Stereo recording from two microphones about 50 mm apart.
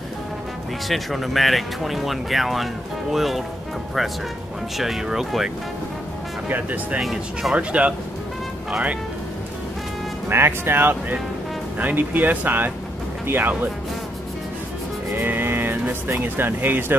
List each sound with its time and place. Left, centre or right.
0.8 s speech: centre
4.7 s speech: centre
6.5 s speech: right
7.0 s speech: centre
7.5 s speech: right
10.3 s speech: right
15.1 s speech: right